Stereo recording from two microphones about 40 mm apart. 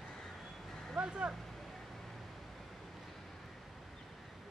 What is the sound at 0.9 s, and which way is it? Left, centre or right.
Speech, right.